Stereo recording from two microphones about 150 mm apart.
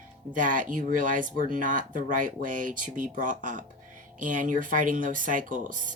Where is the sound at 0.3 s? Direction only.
60° right (ahead or behind).